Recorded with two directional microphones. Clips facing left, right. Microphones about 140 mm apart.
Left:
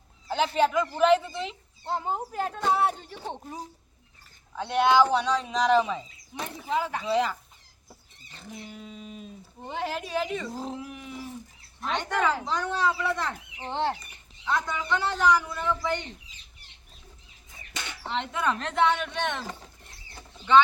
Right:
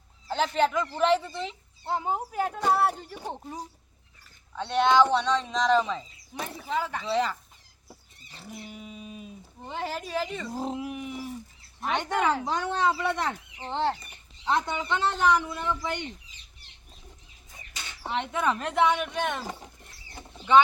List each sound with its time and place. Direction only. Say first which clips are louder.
0.3 s speech: left 1 dB; 5° left (ahead or behind)
4.5 s speech: even; 10° left (ahead or behind)
7.9 s livestock: right 1 dB; 5° right (ahead or behind)
9.6 s speech: left 1 dB; centre (ahead or behind)
10.5 s a sound: right 3 dB; 15° right (ahead or behind)
11.9 s a man's voice: right 1 dB; 20° right (ahead or behind)
13.6 s speech: even; centre (ahead or behind)
14.4 s a man's voice: right 2 dB; 25° right (ahead or behind)
18.0 s speech: right 1 dB; 10° right (ahead or behind)